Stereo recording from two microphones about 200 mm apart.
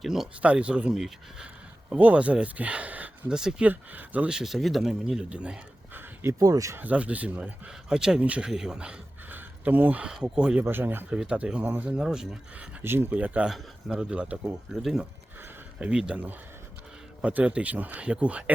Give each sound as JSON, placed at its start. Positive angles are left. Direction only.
{"t": 0.0, "sound": "speech", "side_deg": 0}
{"t": 15.4, "sound": "a sound", "side_deg": -5}
{"t": 17.2, "sound": "speech", "side_deg": -5}